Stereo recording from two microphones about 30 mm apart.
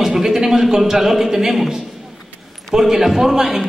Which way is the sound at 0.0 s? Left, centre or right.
Centre.